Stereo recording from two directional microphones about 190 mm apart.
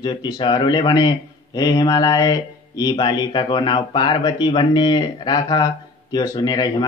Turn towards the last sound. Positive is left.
turn(degrees=20)  # may be behind; listen again after turning